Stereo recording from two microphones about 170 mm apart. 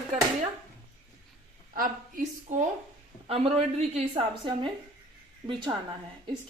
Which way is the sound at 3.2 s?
35° right (ahead or behind).